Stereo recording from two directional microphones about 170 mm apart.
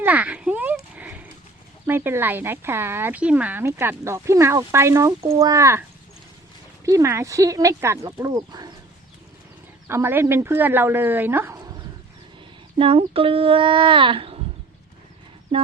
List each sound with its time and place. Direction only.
0.0 s a sound: 10° right (ahead or behind)
1.9 s speech: 15° right (ahead or behind)
6.8 s speech: 15° right (ahead or behind)
9.8 s speech: 15° right (ahead or behind)
12.8 s speech: 35° right (ahead or behind)